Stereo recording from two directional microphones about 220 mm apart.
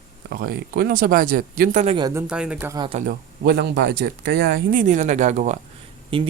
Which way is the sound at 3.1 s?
50° right (ahead or behind).